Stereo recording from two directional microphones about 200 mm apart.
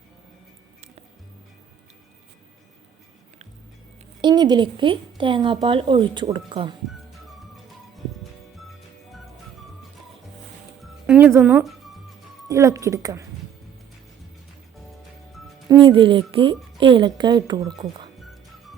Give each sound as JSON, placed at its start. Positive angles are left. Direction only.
{"t": 4.2, "sound": "a woman's voice", "side_deg": -20}
{"t": 8.2, "sound": "music", "side_deg": 0}
{"t": 11.0, "sound": "speech", "side_deg": -10}
{"t": 15.7, "sound": "a woman's voice", "side_deg": -25}